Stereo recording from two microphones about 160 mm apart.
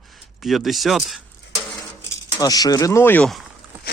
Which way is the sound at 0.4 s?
Centre (ahead or behind).